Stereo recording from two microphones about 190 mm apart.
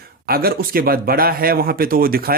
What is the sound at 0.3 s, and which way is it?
Speech, 50° right (ahead or behind).